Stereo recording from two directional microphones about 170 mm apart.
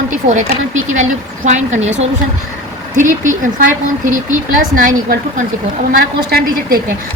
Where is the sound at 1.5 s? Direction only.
45° right (ahead or behind).